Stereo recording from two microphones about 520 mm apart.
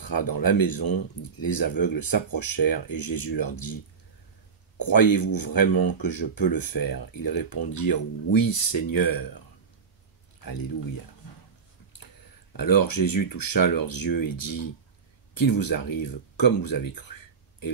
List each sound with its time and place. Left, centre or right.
0.0 s speech: left
12.5 s speech: left